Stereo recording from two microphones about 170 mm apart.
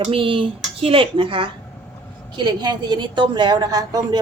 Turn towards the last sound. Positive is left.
turn(degrees=-20)  # may be behind; listen again after turning